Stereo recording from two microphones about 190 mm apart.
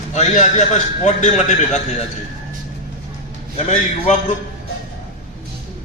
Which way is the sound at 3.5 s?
40° left (ahead or behind).